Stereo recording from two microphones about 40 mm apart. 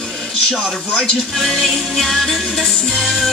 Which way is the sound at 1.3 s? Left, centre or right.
Centre.